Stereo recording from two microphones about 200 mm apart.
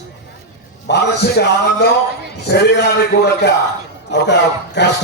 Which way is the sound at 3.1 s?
50° left (ahead or behind).